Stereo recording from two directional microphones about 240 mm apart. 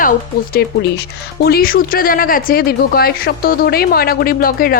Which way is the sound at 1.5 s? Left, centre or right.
Left.